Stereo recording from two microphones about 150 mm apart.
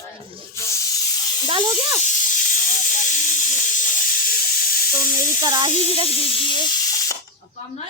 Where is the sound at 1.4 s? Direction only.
35° right (ahead or behind).